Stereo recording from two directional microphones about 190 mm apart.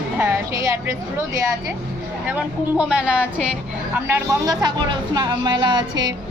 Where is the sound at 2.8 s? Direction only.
5° right (ahead or behind).